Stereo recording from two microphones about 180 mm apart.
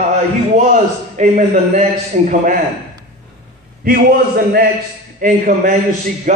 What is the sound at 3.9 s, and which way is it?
A man's voice, 60° right (ahead or behind).